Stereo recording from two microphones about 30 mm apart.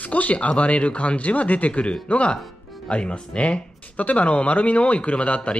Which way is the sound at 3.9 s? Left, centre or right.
Left.